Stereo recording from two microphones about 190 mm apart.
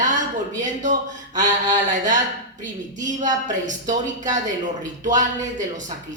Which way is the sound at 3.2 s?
40° right (ahead or behind).